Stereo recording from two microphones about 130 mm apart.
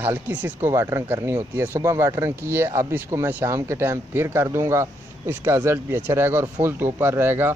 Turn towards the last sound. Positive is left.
turn(degrees=-15)  # may be behind; listen again after turning